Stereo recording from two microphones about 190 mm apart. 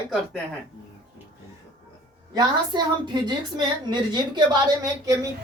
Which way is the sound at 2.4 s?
25° right (ahead or behind).